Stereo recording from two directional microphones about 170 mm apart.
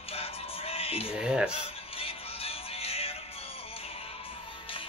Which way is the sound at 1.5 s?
35° left (ahead or behind).